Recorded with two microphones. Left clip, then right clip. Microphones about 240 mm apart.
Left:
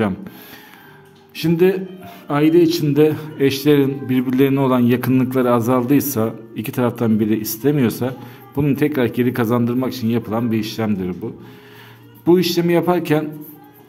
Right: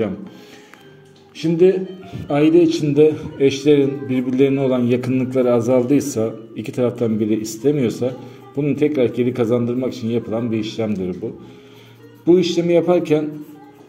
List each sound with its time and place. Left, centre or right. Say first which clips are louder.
1.3 s a man's voice: right 1 dB; left
12.3 s a man's voice: even; left